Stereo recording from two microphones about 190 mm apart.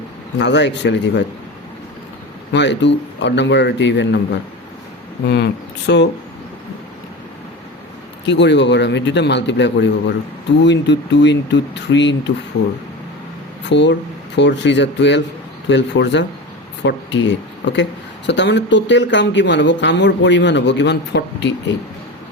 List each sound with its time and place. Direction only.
0.3 s speech: 65° left (ahead or behind)
2.5 s speech: 65° left (ahead or behind)
5.3 s speech: 60° left (ahead or behind)
8.3 s speech: 65° left (ahead or behind)
13.7 s speech: 70° left (ahead or behind)